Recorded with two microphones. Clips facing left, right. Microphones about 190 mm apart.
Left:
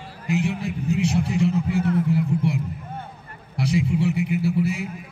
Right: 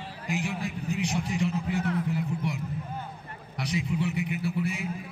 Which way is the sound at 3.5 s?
30° left (ahead or behind).